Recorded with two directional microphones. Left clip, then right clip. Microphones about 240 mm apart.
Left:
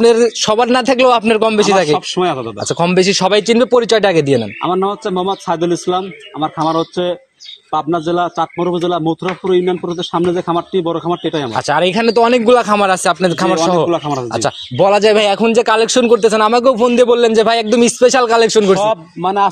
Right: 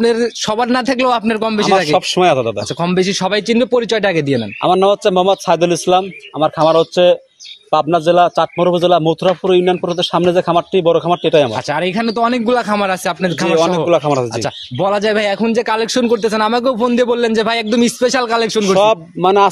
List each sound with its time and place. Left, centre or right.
0.0 s speech: centre
2.0 s a man's voice: right
2.8 s speech: centre
4.6 s a man's voice: right
11.5 s speech: centre
13.8 s a man's voice: right
14.4 s speech: centre
18.8 s a man's voice: right